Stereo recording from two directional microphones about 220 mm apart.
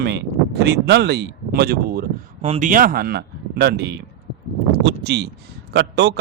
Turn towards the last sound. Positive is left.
turn(degrees=-50)  # may be behind; listen again after turning